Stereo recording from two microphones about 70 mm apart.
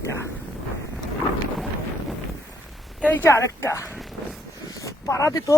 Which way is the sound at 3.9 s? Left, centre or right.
Centre.